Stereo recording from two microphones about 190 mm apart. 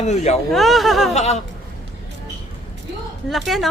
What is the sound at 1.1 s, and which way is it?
Speech, 35° left (ahead or behind).